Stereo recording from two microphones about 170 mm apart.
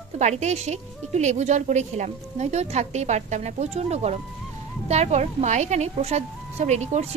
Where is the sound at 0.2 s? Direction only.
40° right (ahead or behind).